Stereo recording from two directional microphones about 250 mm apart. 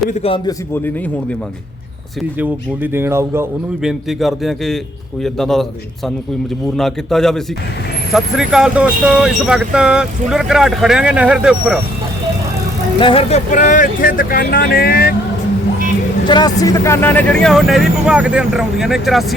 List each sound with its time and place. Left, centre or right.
0.1 s a man's voice: left
2.4 s speech: centre
6.7 s speech: centre
13.0 s speech: left
16.2 s speech: centre